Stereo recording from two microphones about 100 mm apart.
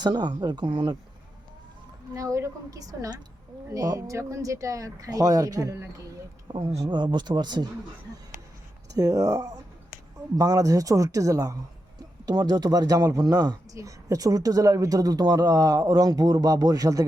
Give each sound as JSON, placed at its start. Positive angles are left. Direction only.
{"t": 0.0, "sound": "speech", "side_deg": -45}
{"t": 2.1, "sound": "speech", "side_deg": -30}
{"t": 6.5, "sound": "speech", "side_deg": -75}
{"t": 6.9, "sound": "speech", "side_deg": -50}
{"t": 9.0, "sound": "speech", "side_deg": -35}